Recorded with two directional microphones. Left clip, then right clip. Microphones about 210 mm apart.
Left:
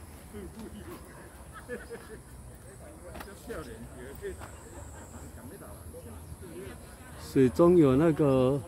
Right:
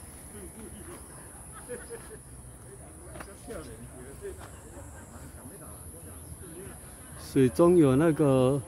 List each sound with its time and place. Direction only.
1.7 s speech: 35° left (ahead or behind)
4.2 s speech: 40° left (ahead or behind)
7.2 s speech: 10° right (ahead or behind)